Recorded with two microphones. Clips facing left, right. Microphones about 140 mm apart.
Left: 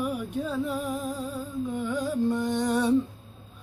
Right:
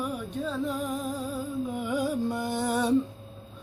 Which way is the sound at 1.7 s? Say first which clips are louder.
Left 1 dB; 10° right (ahead or behind).